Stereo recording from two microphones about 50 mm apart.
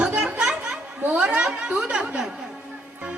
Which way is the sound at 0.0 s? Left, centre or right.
Right.